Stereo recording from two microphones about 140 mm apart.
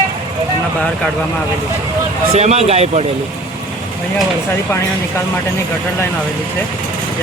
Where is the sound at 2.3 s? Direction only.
50° right (ahead or behind).